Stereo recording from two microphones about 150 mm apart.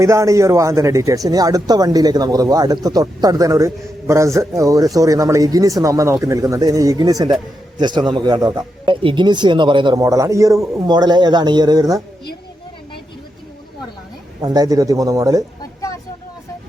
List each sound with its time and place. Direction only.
0.0 s speech: 20° right (ahead or behind)
14.4 s speech: 25° right (ahead or behind)